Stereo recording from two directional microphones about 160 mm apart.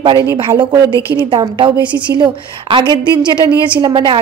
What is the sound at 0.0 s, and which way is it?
A woman's voice, 30° right (ahead or behind).